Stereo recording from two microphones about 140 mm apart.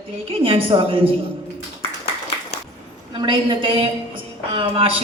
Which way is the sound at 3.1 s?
35° right (ahead or behind).